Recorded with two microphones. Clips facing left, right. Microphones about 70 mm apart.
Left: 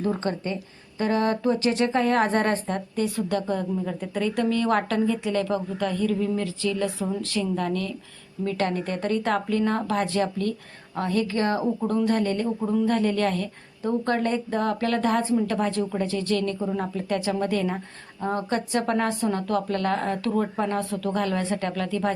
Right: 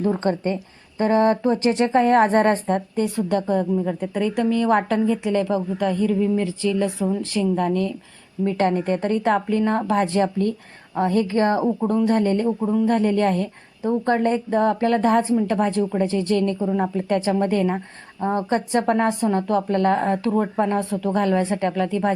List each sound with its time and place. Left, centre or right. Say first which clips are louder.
0.0 s a woman's voice: right 5 dB; right